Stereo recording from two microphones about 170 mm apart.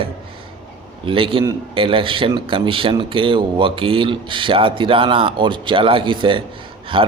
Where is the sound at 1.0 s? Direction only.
30° right (ahead or behind).